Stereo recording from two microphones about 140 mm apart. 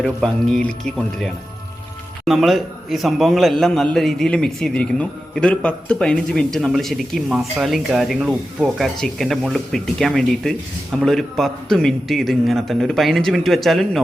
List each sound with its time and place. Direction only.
0.0 s a man's voice: 5° left (ahead or behind)